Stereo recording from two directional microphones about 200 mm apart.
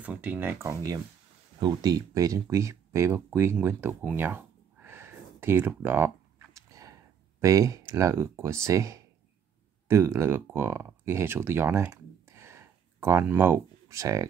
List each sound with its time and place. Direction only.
0.0 s speech: 10° right (ahead or behind)
2.5 s a sound: 15° right (ahead or behind)
8.6 s speech: 15° right (ahead or behind)